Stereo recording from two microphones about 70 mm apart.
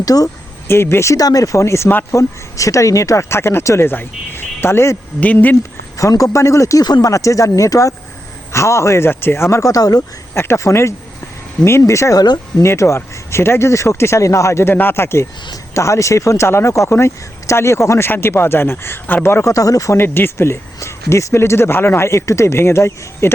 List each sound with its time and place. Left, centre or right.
0.0 s speech: left
0.7 s speech: left
1.1 s speech: left
5.2 s speech: left
6.0 s speech: left
6.8 s speech: left
7.1 s speech: left
10.3 s speech: left
12.2 s speech: left
12.6 s speech: left
19.5 s speech: left
20.0 s speech: left